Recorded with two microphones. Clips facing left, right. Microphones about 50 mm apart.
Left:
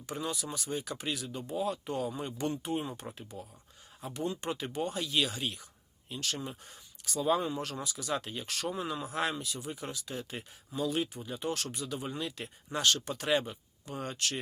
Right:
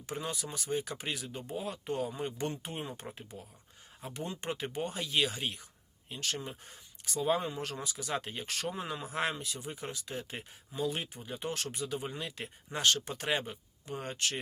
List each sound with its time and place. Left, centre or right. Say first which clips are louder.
0.0 s speech: left 1 dB; right